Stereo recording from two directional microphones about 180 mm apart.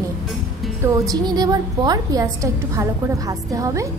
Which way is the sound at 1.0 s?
20° right (ahead or behind).